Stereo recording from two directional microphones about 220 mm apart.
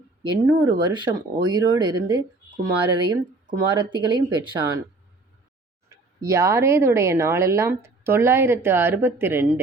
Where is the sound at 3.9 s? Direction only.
20° right (ahead or behind).